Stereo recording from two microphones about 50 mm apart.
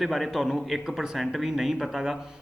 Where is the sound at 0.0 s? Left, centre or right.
Centre.